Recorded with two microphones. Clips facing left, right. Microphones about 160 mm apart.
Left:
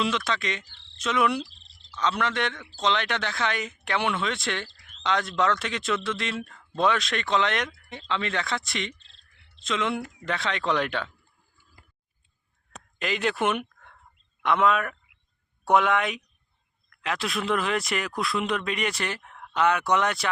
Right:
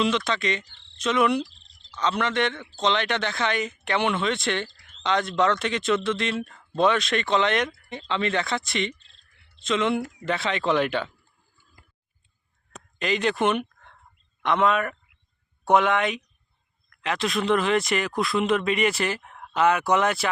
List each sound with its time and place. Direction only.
0.3 s speech: centre (ahead or behind)
0.9 s cricket: centre (ahead or behind)
1.4 s a sound: 20° right (ahead or behind)
2.0 s speech: centre (ahead or behind)
13.0 s speech: centre (ahead or behind)